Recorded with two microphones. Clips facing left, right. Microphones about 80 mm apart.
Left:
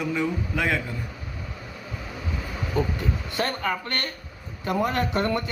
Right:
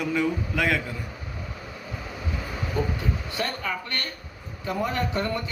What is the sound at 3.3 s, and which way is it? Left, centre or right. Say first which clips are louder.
Speech: left 5 dB; left.